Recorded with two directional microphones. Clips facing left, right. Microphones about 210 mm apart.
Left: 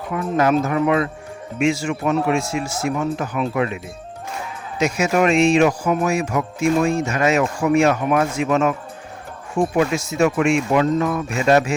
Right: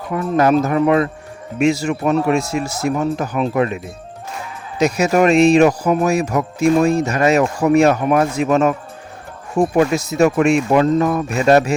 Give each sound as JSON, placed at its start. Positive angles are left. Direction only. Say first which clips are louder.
{"t": 0.1, "sound": "speech", "louder": "right 3 dB", "side_deg": -40}
{"t": 4.8, "sound": "speech", "louder": "right 4 dB", "side_deg": -35}
{"t": 9.7, "sound": "speech", "louder": "right 4 dB", "side_deg": -40}